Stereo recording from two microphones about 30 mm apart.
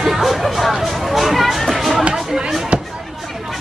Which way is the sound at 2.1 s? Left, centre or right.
Centre.